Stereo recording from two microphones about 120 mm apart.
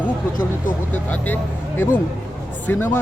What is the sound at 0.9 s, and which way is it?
Speech, 15° left (ahead or behind).